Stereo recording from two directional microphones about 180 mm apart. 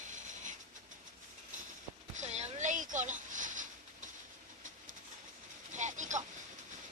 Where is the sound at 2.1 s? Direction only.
40° right (ahead or behind).